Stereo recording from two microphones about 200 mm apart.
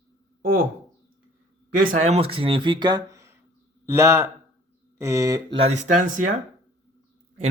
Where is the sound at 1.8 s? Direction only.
40° right (ahead or behind).